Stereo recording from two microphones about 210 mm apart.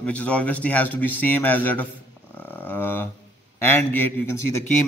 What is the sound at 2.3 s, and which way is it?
Dog, 10° left (ahead or behind).